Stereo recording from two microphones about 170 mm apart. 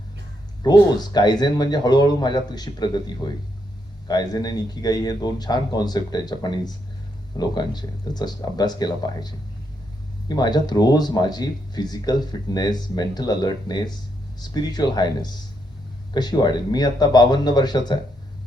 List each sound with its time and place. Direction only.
0.6 s speech: 25° left (ahead or behind)